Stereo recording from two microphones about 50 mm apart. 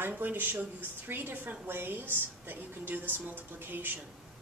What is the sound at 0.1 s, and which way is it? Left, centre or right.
A woman's voice, right.